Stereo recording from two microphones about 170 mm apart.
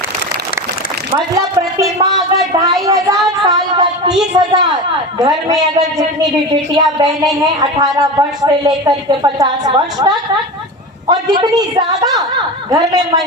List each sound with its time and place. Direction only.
1.4 s a sound: 20° right (ahead or behind)
4.4 s a woman's voice: 25° right (ahead or behind)
7.4 s a woman's voice: 25° right (ahead or behind)